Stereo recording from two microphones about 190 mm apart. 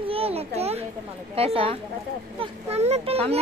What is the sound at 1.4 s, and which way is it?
A child's voice, 30° right (ahead or behind).